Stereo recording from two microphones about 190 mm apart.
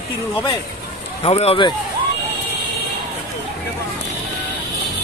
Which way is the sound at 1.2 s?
30° left (ahead or behind).